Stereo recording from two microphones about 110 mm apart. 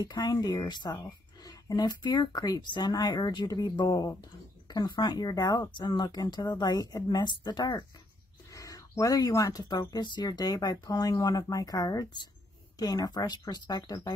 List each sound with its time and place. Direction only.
0.0 s speech: 35° left (ahead or behind)